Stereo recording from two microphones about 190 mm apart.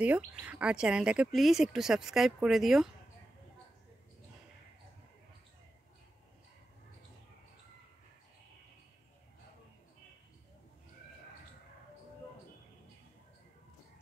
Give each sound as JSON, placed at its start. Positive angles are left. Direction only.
{"t": 0.0, "sound": "speech", "side_deg": -5}